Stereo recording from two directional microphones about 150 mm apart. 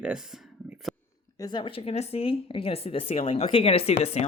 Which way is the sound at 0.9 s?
Centre (ahead or behind).